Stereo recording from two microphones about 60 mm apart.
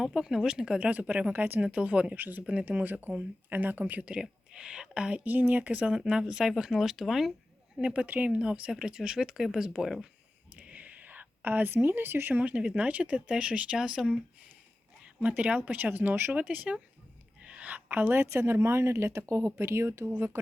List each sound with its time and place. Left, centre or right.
0.0 s speech: centre; by 1.6 s right
1.6 s speech: centre
4.1 s speech: centre
5.2 s speech: right
5.9 s speech: centre
7.8 s speech: right
10.7 s a woman's voice: right